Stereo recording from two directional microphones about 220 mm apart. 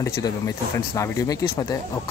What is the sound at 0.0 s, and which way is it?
Speech, 15° left (ahead or behind).